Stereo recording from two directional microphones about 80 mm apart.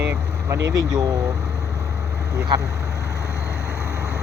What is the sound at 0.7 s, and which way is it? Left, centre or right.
Speech, right.